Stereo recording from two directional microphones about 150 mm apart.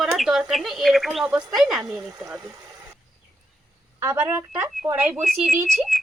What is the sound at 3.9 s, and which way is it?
Speech, 15° right (ahead or behind).